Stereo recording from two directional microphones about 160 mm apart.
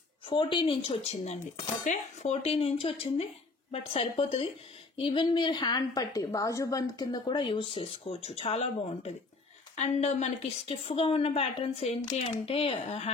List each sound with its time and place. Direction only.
0.3 s a woman's voice: 30° left (ahead or behind)